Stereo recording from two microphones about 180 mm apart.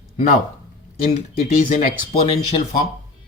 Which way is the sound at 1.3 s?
50° left (ahead or behind).